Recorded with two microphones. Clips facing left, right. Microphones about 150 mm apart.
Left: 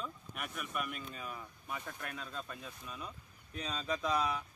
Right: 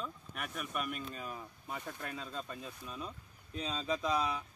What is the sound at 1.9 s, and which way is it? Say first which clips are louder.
Speech: right 2 dB; 25° right (ahead or behind).